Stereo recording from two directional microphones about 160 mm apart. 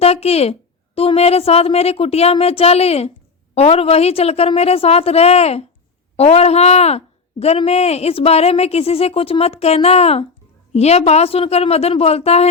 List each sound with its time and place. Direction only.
0.0 s speech: 40° left (ahead or behind)